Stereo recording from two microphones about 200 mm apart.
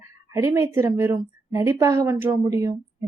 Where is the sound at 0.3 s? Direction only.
15° right (ahead or behind).